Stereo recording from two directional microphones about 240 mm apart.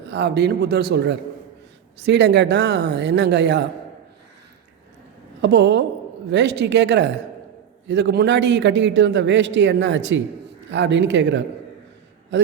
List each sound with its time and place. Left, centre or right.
0.1 s a man's voice: right
5.4 s a woman's voice: right